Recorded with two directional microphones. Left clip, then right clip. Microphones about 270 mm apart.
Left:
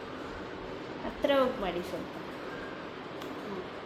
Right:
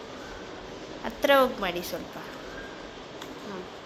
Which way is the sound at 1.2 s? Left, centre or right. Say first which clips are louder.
Right 6 dB; right.